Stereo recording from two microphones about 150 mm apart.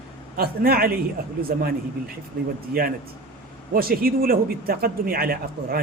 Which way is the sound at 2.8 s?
85° right.